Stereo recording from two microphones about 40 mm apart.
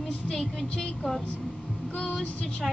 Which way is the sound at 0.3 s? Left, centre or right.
Centre.